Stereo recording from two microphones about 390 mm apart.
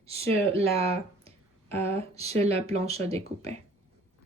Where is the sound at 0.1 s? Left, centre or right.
Centre.